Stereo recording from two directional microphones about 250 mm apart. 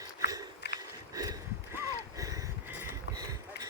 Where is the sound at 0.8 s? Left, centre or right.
Centre.